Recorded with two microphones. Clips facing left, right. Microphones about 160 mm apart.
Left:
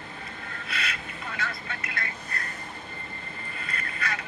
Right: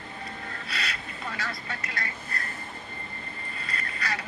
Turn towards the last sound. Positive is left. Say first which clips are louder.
# even
turn(degrees=-35)  # may be behind; listen again after turning